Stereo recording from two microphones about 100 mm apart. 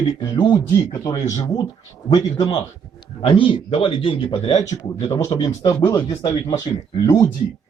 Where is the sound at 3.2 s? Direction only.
60° left (ahead or behind).